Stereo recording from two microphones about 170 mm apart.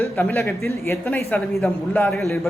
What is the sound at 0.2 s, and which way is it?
Speech, 10° left (ahead or behind).